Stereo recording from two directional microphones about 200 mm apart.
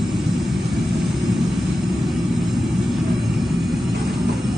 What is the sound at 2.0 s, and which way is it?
Vehicle, centre (ahead or behind).